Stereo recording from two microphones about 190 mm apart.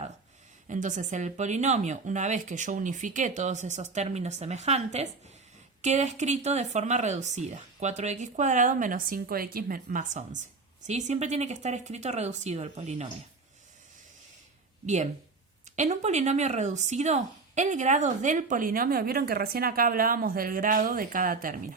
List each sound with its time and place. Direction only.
0.7 s speech: 40° right (ahead or behind)
15.7 s speech: 40° right (ahead or behind)